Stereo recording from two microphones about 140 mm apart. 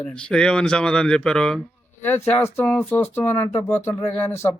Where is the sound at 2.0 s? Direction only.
15° left (ahead or behind).